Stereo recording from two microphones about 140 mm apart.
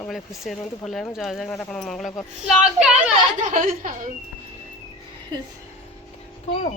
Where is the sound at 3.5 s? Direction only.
70° right (ahead or behind).